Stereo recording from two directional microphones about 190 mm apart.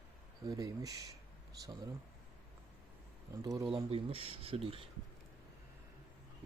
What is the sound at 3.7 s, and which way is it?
Speech, 30° right (ahead or behind).